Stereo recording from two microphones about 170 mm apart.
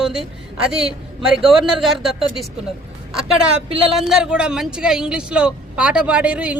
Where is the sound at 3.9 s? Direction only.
Centre (ahead or behind).